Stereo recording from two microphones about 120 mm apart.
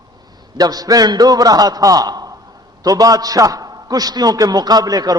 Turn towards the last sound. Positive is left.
turn(degrees=-30)  # may be behind; listen again after turning